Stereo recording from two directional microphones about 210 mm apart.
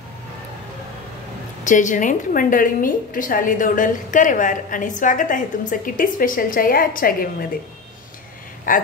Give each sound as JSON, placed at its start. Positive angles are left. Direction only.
{"t": 1.6, "sound": "a woman's voice", "side_deg": 35}
{"t": 8.7, "sound": "a woman's voice", "side_deg": 40}